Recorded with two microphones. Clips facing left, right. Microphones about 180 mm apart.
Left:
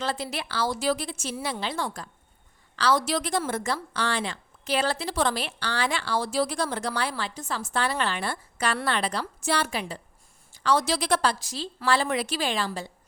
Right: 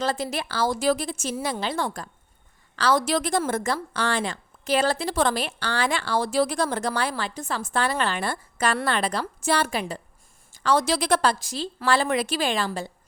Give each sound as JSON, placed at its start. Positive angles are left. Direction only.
{"t": 0.0, "sound": "a woman's voice", "side_deg": -45}